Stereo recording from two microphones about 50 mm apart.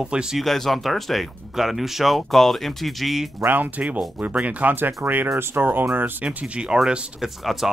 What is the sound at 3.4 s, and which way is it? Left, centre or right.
Speech, right.